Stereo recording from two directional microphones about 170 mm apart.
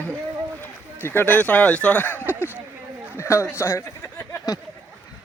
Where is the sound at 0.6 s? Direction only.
10° left (ahead or behind).